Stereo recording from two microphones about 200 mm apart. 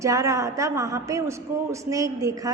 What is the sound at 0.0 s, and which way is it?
A woman's voice, 15° right (ahead or behind).